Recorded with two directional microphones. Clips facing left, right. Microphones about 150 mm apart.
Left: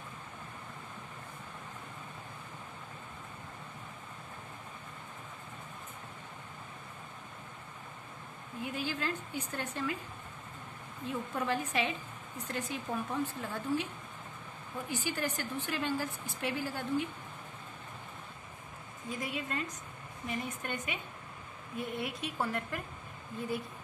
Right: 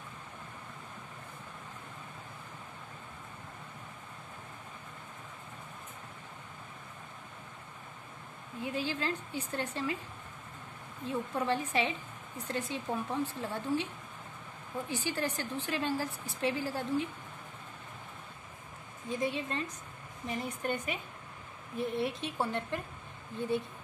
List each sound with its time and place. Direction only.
8.6 s a woman's voice: 30° right (ahead or behind)
11.1 s speech: 30° right (ahead or behind)
14.9 s a woman's voice: 30° right (ahead or behind)
19.0 s a woman's voice: 25° right (ahead or behind)